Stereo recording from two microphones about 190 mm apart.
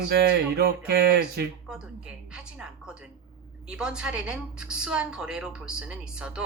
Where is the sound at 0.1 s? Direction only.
55° right (ahead or behind).